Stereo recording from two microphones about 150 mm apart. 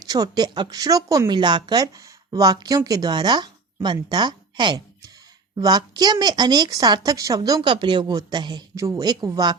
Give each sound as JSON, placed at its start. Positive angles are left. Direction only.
{"t": 0.1, "sound": "speech", "side_deg": -25}